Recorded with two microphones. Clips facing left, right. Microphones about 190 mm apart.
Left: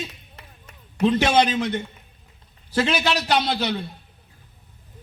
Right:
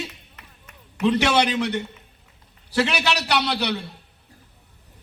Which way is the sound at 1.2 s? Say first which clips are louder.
Left 1 dB; 70° right (ahead or behind).